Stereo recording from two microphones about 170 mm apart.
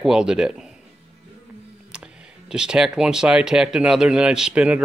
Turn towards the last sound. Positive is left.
turn(degrees=-5)  # may be behind; listen again after turning